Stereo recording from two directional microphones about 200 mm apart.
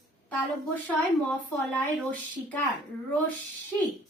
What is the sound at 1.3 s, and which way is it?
Speech, 5° left (ahead or behind).